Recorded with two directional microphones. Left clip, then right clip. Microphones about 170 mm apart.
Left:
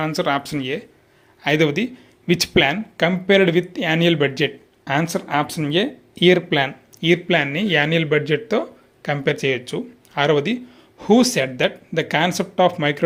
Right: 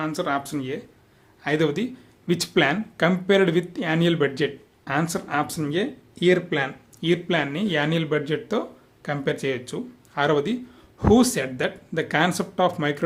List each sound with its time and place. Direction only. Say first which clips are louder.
0.0 s speech: left 5 dB; 20° left (ahead or behind)